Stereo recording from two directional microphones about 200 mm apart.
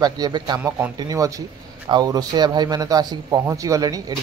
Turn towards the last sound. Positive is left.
turn(degrees=-20)  # may be behind; listen again after turning